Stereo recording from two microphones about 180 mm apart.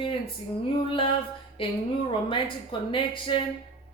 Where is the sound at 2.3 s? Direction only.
30° left (ahead or behind).